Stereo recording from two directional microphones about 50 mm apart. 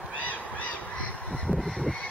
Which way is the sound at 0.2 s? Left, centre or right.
Left.